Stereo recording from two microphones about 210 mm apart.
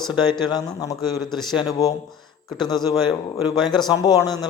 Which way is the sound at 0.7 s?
15° left (ahead or behind).